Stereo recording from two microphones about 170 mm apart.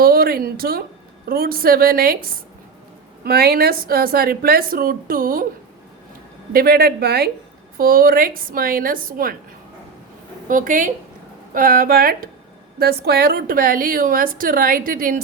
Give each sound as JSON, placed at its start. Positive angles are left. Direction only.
{"t": 0.0, "sound": "a woman's voice", "side_deg": -60}
{"t": 3.2, "sound": "a woman's voice", "side_deg": -65}
{"t": 6.5, "sound": "a woman's voice", "side_deg": -60}
{"t": 7.8, "sound": "a woman's voice", "side_deg": -60}
{"t": 10.5, "sound": "a woman's voice", "side_deg": -50}